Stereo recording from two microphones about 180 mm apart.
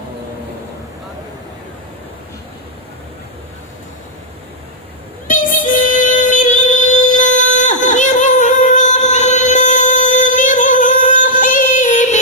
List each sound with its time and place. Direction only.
5.3 s music: 50° left (ahead or behind)